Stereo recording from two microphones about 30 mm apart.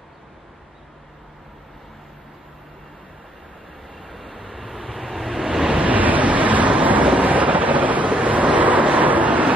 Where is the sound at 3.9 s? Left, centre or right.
Centre.